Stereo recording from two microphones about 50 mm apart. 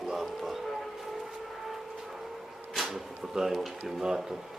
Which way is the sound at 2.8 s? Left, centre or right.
Centre.